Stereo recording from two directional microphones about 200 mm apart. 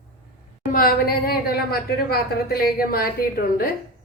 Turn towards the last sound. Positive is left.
turn(degrees=45)  # may be behind; listen again after turning